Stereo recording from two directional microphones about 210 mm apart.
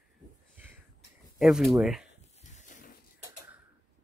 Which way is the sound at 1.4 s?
Centre (ahead or behind).